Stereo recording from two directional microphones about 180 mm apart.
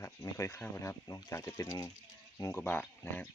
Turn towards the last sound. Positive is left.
turn(degrees=10)  # may be behind; listen again after turning